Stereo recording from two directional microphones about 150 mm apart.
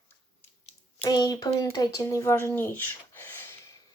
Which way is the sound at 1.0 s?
25° left (ahead or behind).